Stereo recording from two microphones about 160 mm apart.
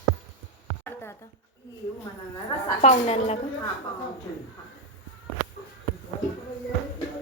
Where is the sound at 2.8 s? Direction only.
45° left (ahead or behind).